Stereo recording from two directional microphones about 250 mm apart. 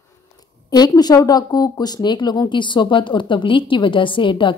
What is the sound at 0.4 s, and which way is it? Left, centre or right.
A woman's voice, centre.